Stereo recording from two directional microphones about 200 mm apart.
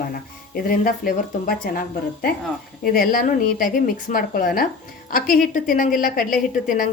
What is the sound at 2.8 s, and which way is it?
A woman's voice, 45° left (ahead or behind).